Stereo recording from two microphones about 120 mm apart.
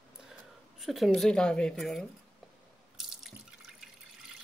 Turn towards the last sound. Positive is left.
turn(degrees=-5)  # may be behind; listen again after turning